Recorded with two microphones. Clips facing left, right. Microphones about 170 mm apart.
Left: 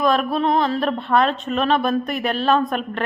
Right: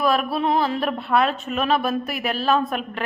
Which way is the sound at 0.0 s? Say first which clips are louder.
Left 2 dB; 5° right (ahead or behind).